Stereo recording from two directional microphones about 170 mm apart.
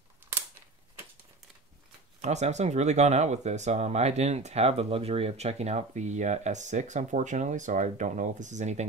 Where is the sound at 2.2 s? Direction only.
40° right (ahead or behind).